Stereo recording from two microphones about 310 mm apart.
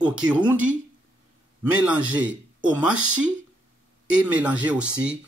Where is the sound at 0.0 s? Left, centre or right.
Centre.